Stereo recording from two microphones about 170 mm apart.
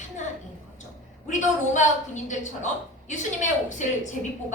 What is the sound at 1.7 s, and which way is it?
A woman's voice, 45° left (ahead or behind).